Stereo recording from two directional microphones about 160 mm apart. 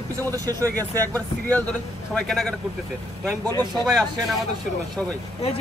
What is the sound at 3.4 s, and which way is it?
Speech, 25° right (ahead or behind).